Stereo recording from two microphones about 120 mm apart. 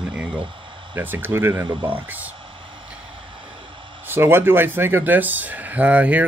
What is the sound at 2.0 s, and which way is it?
Speech, 15° right (ahead or behind).